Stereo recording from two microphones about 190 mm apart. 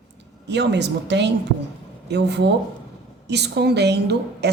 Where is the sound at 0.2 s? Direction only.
65° right (ahead or behind).